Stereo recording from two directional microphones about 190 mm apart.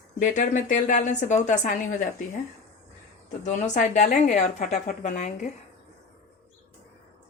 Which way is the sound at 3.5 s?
40° left (ahead or behind).